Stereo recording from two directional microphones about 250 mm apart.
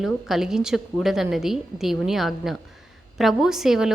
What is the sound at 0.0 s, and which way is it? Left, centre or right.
A woman's voice, centre.